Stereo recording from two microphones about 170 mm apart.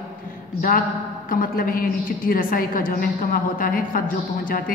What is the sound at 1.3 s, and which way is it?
A woman's voice, 55° left (ahead or behind).